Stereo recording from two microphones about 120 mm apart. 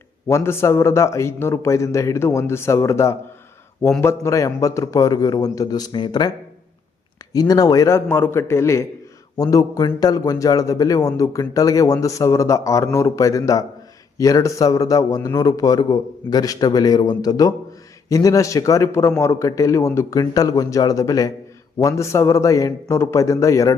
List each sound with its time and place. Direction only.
0.3 s a man's voice: 20° left (ahead or behind)
7.3 s a man's voice: 30° left (ahead or behind)